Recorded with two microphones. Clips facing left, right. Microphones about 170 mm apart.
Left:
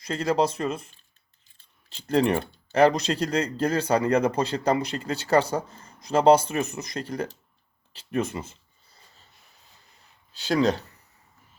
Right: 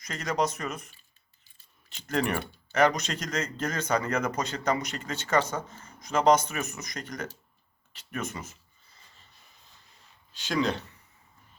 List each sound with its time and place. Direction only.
0.0 s speech: 30° left (ahead or behind)
10.4 s speech: 40° left (ahead or behind)